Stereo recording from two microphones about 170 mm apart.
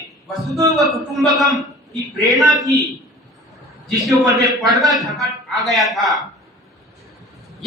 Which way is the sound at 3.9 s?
20° right (ahead or behind).